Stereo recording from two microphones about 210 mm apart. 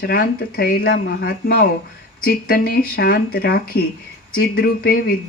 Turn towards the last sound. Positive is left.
turn(degrees=45)  # may be behind; listen again after turning